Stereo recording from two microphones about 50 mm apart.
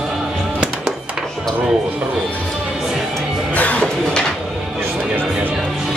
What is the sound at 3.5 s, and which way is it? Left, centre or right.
Music, left.